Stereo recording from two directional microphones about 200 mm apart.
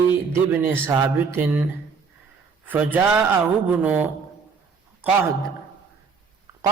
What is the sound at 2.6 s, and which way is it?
A man's voice, 10° right (ahead or behind).